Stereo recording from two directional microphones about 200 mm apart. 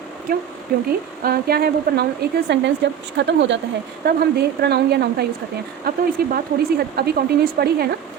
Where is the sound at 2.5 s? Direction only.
60° right (ahead or behind).